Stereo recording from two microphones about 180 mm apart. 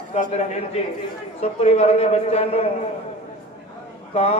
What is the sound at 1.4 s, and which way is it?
A man's voice, 35° left (ahead or behind).